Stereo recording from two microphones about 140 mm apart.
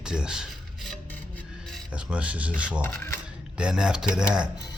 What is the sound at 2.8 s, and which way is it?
Filing, 15° left (ahead or behind).